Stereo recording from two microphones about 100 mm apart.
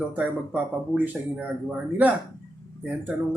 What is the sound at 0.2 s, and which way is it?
Speech, 15° right (ahead or behind).